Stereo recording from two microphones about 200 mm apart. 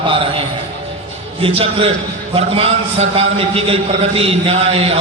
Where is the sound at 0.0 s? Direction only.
25° right (ahead or behind).